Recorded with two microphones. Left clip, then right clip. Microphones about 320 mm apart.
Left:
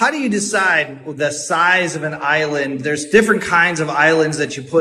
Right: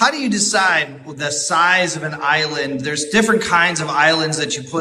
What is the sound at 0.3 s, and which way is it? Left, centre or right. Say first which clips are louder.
A man's voice: even; centre.